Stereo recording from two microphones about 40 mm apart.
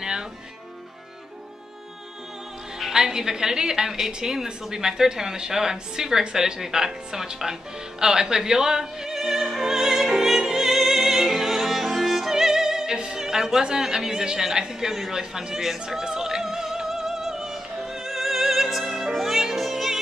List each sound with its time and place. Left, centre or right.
2.9 s a woman's voice: centre
8.0 s opera: centre
13.2 s a man's voice: centre
15.8 s music: centre